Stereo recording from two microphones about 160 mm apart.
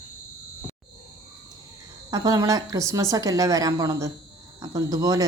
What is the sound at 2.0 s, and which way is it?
Speech, 25° right (ahead or behind).